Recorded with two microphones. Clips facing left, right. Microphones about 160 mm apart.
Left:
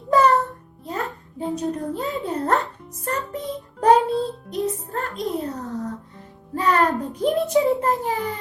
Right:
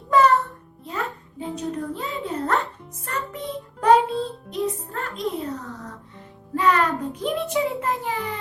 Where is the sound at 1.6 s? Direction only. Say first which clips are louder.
Left 1 dB; 40° left (ahead or behind).